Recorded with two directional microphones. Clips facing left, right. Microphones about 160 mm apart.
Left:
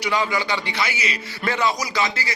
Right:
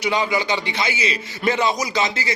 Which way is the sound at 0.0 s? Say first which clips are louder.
Right 2 dB; 20° right (ahead or behind).